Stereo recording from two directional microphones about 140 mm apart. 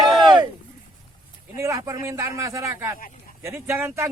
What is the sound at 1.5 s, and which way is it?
Speech, 20° right (ahead or behind).